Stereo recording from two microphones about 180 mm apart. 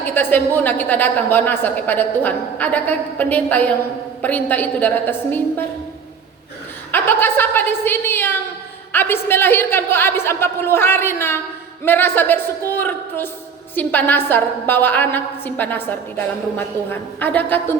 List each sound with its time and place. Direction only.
0.0 s a woman's voice: 10° left (ahead or behind)
6.9 s a woman's voice: 10° left (ahead or behind)